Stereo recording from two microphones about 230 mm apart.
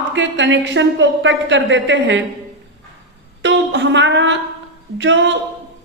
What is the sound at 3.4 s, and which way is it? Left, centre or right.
A woman's voice, right.